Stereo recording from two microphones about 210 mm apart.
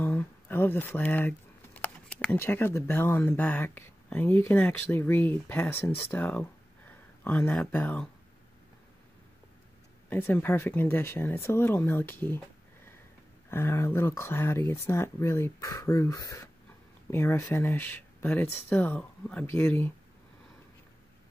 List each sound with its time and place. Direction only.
0.0 s speech: 10° left (ahead or behind)
10.0 s speech: 10° left (ahead or behind)
13.5 s speech: 10° left (ahead or behind)